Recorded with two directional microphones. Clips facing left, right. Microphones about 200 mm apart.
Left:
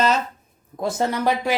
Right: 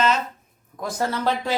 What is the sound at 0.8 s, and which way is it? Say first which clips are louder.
Speech: left 3 dB; 25° left (ahead or behind).